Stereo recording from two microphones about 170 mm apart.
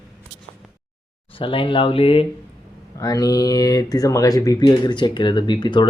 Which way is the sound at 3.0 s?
20° left (ahead or behind).